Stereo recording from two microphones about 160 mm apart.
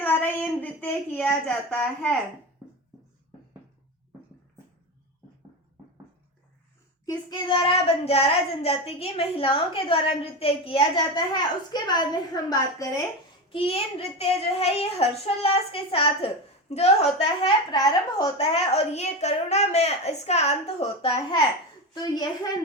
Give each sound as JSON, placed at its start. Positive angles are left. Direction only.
{"t": 0.0, "sound": "speech", "side_deg": 10}
{"t": 7.0, "sound": "child singing", "side_deg": 25}
{"t": 13.5, "sound": "child singing", "side_deg": 35}
{"t": 17.7, "sound": "a woman's voice", "side_deg": 25}
{"t": 18.3, "sound": "a woman's voice", "side_deg": 40}